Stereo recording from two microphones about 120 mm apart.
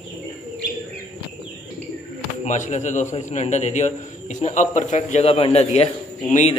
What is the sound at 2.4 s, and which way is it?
A man's voice, 80° left.